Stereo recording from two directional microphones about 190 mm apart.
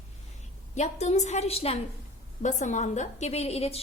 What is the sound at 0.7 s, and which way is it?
A woman's voice, 35° left (ahead or behind).